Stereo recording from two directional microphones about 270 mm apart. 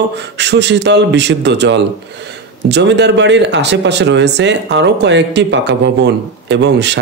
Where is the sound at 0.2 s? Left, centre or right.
Right.